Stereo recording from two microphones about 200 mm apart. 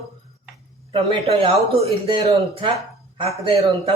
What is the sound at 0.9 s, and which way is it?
Speech, 30° right (ahead or behind).